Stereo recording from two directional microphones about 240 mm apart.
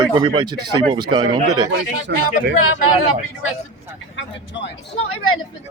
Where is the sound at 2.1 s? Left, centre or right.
Right.